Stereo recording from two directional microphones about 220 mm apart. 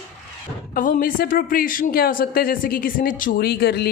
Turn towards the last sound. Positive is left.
turn(degrees=45)  # may be behind; listen again after turning